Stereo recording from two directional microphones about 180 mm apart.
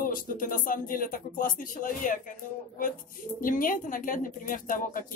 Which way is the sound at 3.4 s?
50° left (ahead or behind).